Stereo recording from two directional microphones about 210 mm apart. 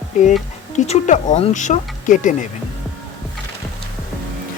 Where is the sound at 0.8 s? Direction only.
35° left (ahead or behind).